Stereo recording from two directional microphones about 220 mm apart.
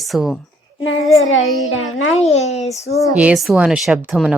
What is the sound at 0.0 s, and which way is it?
Speech, centre (ahead or behind).